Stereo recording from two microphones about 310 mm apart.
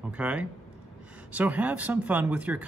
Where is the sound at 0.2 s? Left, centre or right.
Centre.